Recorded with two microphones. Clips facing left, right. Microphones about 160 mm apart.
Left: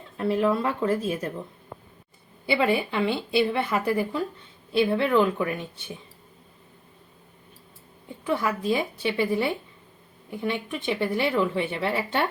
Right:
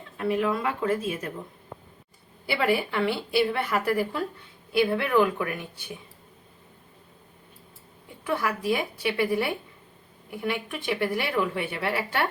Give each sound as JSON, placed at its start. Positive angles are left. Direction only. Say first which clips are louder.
{"t": 0.3, "sound": "speech", "louder": "left 2 dB", "side_deg": 35}
{"t": 2.5, "sound": "speech", "louder": "left 2 dB", "side_deg": 20}
{"t": 8.4, "sound": "speech", "louder": "even", "side_deg": 25}